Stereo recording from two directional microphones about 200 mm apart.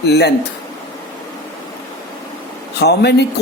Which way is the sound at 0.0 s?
55° left (ahead or behind).